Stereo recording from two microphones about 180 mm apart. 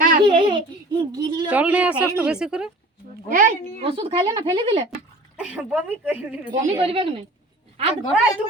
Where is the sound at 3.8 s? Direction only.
30° right (ahead or behind).